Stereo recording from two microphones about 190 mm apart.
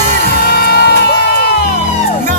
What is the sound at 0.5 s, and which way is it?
Music, 55° left (ahead or behind).